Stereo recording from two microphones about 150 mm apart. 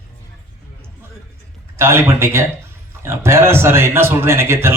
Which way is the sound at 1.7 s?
15° right (ahead or behind).